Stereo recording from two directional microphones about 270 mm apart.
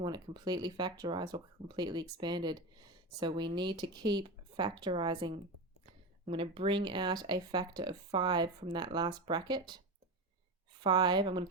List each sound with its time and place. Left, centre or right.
0.0 s speech: centre
10.8 s speech: centre